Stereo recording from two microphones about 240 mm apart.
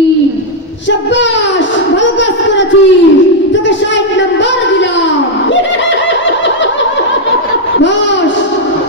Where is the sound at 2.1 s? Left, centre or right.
Left.